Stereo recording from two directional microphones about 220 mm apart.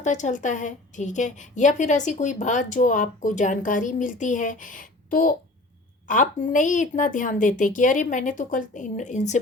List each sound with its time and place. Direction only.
0.0 s a woman's voice: 35° left (ahead or behind)